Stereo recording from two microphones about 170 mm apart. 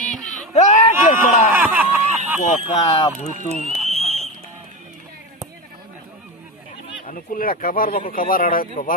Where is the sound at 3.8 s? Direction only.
40° right (ahead or behind).